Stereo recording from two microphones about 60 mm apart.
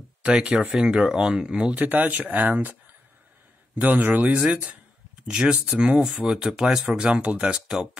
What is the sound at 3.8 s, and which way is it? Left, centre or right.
Speech, right.